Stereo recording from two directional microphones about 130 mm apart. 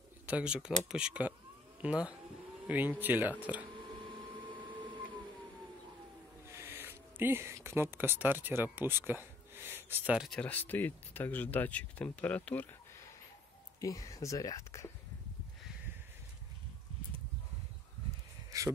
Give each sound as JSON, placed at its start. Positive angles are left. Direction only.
{"t": 0.3, "sound": "speech", "side_deg": -10}
{"t": 4.3, "sound": "printer", "side_deg": -40}
{"t": 6.4, "sound": "speech", "side_deg": -20}
{"t": 10.1, "sound": "speech", "side_deg": 0}
{"t": 10.4, "sound": "speech", "side_deg": 15}
{"t": 13.7, "sound": "speech", "side_deg": 25}
{"t": 18.5, "sound": "a sound", "side_deg": -25}